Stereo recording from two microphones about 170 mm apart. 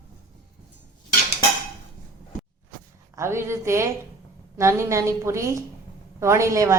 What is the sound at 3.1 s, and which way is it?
A woman's voice, 15° right (ahead or behind).